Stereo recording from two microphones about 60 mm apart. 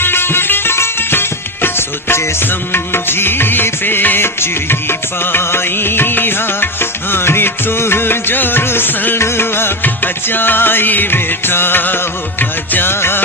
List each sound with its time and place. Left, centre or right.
0.0 s music: left
9.1 s music: left